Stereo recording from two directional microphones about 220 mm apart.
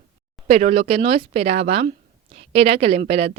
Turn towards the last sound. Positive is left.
turn(degrees=-25)  # may be behind; listen again after turning